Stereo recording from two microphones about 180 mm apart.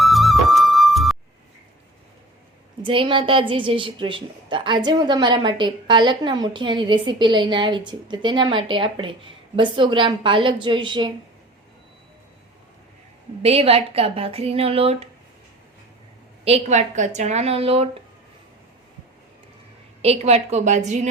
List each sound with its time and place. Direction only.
0.0 s music: centre (ahead or behind)
2.8 s a woman's voice: 30° right (ahead or behind)
13.4 s speech: 35° right (ahead or behind)
16.4 s speech: 35° right (ahead or behind)
20.0 s speech: 35° right (ahead or behind)